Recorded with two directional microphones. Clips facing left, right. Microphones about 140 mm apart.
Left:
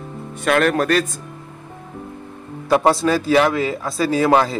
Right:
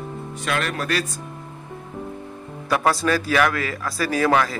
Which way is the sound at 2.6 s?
25° left (ahead or behind).